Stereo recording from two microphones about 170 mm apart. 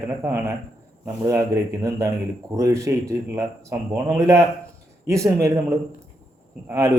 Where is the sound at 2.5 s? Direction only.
20° right (ahead or behind).